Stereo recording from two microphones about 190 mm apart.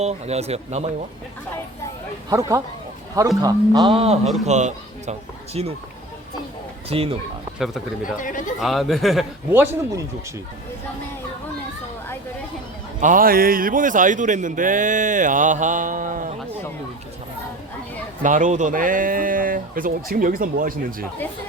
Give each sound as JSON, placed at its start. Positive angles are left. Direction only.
{"t": 0.0, "sound": "speech", "side_deg": -35}
{"t": 3.2, "sound": "speech", "side_deg": -20}
{"t": 3.8, "sound": "a man's voice", "side_deg": -30}
{"t": 6.9, "sound": "speech", "side_deg": -30}
{"t": 7.6, "sound": "speech", "side_deg": 0}
{"t": 8.2, "sound": "speech", "side_deg": 45}
{"t": 8.5, "sound": "speech", "side_deg": 0}
{"t": 9.5, "sound": "speech", "side_deg": -10}
{"t": 13.0, "sound": "a man's voice", "side_deg": -45}
{"t": 18.2, "sound": "a man's voice", "side_deg": -40}